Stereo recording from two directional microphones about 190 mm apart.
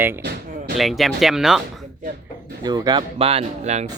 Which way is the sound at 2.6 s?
20° right (ahead or behind).